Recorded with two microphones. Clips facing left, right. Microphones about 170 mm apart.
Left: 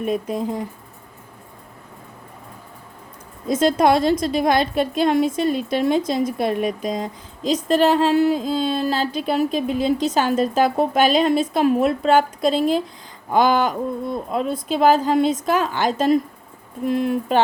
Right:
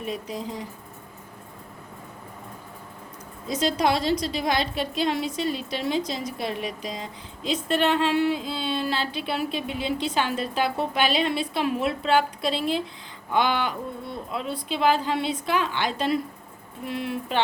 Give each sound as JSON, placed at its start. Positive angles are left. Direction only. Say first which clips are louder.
{"t": 0.0, "sound": "a woman's voice", "louder": "left 8 dB", "side_deg": 50}
{"t": 3.4, "sound": "a woman's voice", "louder": "left 7 dB", "side_deg": 50}